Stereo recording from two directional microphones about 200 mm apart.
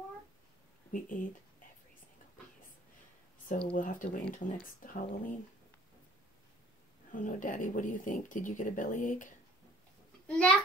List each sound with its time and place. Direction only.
0.9 s speech: 40° left (ahead or behind)
3.7 s speech: 40° left (ahead or behind)
7.1 s speech: 40° left (ahead or behind)
10.2 s a child's voice: 5° left (ahead or behind)